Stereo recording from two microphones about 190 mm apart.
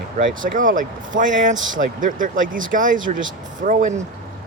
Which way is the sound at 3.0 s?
90° right.